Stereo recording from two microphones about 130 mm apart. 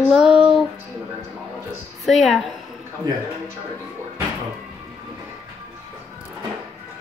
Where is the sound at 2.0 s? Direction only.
Centre (ahead or behind).